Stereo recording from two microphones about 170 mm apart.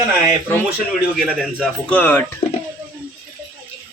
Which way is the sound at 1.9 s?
10° left (ahead or behind).